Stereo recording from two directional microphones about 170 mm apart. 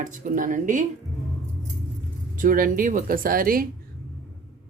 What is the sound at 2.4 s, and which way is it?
Speech, 55° right (ahead or behind).